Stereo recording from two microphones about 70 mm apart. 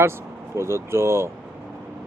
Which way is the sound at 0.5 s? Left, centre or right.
Right.